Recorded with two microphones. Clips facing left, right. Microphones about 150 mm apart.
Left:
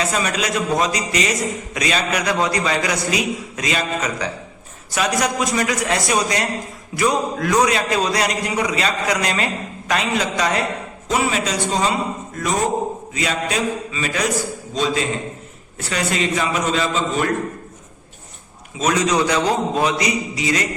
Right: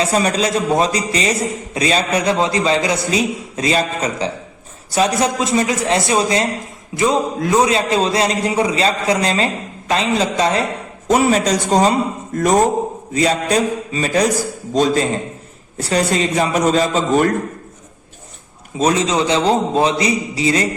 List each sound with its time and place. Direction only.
0.0 s a man's voice: 35° right (ahead or behind)
11.1 s a man's voice: 45° right (ahead or behind)
18.8 s a man's voice: 30° right (ahead or behind)